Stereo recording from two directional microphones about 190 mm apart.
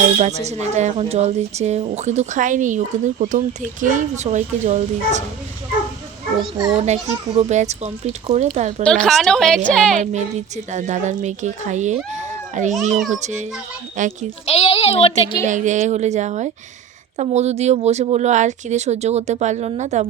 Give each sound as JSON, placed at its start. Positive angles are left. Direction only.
{"t": 0.2, "sound": "a woman's voice", "side_deg": -35}
{"t": 6.6, "sound": "a child's voice", "side_deg": -25}
{"t": 6.8, "sound": "a woman's voice", "side_deg": -35}
{"t": 8.8, "sound": "a woman's voice", "side_deg": 5}
{"t": 10.0, "sound": "a woman's voice", "side_deg": -40}
{"t": 12.1, "sound": "a sound", "side_deg": -40}
{"t": 13.1, "sound": "a woman's voice", "side_deg": -35}
{"t": 14.4, "sound": "a child's voice", "side_deg": 35}
{"t": 15.4, "sound": "a woman's voice", "side_deg": -40}